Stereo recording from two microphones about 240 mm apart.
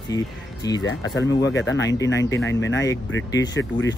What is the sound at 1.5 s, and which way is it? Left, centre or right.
Speech, left.